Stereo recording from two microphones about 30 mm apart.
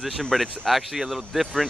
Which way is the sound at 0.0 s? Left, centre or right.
Centre.